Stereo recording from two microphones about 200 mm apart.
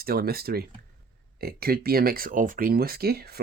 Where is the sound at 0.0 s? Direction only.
50° right (ahead or behind).